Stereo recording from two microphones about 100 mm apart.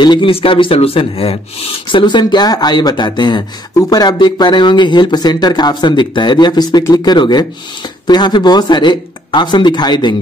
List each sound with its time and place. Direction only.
0.0 s speech: 55° left (ahead or behind)